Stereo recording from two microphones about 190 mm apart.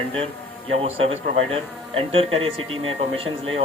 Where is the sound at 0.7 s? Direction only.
30° right (ahead or behind).